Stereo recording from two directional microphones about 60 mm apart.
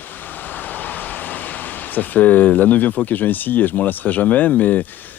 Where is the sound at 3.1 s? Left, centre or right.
Left.